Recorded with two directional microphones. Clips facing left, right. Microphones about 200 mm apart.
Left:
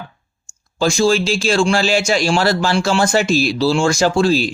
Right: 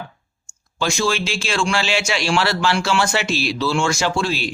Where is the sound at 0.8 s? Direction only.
35° left (ahead or behind).